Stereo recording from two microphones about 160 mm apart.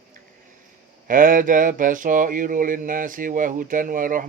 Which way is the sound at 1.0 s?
55° right (ahead or behind).